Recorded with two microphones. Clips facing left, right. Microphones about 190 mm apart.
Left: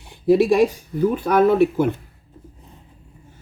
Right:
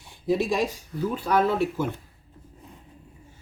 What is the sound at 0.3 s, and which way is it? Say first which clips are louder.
Speech: left 9 dB; 60° left (ahead or behind).